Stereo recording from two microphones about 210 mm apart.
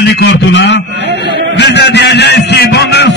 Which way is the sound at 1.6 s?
55° left (ahead or behind).